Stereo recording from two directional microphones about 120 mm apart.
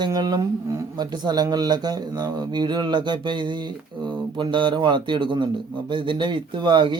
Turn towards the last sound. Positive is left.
turn(degrees=-40)  # may be behind; listen again after turning